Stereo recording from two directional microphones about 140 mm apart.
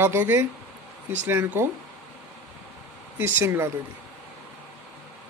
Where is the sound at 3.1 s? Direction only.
15° right (ahead or behind).